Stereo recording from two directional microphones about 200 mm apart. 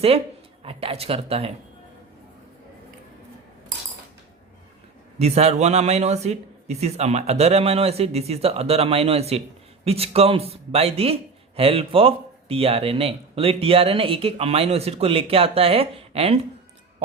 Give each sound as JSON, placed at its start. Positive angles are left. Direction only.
{"t": 0.6, "sound": "a man's voice", "side_deg": -30}
{"t": 5.2, "sound": "a man's voice", "side_deg": -30}